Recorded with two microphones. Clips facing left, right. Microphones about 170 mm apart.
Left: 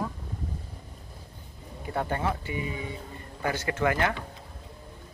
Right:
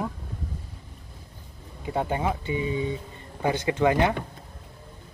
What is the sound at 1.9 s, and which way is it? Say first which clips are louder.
Speech: right 3 dB; 15° right (ahead or behind).